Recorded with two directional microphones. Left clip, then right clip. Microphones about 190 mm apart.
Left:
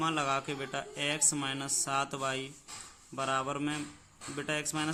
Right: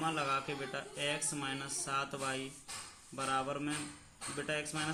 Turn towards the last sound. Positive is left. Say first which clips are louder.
# left 3 dB
turn(degrees=40)  # may be behind; listen again after turning